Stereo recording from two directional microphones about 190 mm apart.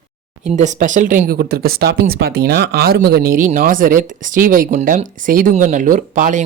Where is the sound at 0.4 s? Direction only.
40° right (ahead or behind).